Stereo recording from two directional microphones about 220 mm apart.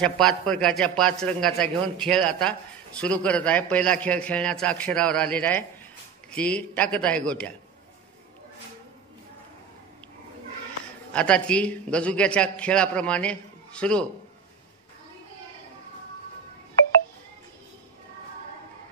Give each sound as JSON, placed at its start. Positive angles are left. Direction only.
{"t": 0.0, "sound": "a man's voice", "side_deg": 5}
{"t": 11.1, "sound": "a man's voice", "side_deg": 5}